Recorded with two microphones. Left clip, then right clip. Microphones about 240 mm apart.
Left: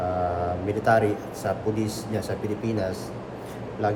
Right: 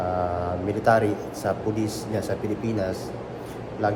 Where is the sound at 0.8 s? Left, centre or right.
Centre.